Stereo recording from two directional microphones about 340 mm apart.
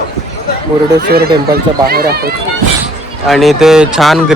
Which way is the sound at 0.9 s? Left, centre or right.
Right.